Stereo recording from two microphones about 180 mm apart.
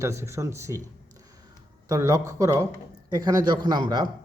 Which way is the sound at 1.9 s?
20° right (ahead or behind).